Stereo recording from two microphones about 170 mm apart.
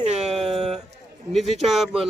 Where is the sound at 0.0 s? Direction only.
40° right (ahead or behind).